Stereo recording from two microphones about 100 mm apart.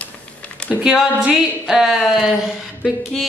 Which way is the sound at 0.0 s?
15° left (ahead or behind).